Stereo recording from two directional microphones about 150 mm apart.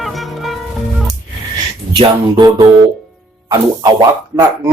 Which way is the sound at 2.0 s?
30° right (ahead or behind).